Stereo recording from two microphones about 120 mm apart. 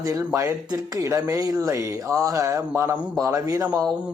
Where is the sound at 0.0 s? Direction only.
30° right (ahead or behind).